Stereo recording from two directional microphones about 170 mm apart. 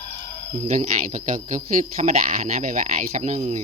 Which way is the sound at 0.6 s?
45° right (ahead or behind).